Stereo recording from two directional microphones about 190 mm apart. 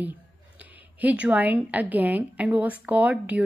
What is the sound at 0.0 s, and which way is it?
A woman's voice, 10° right (ahead or behind).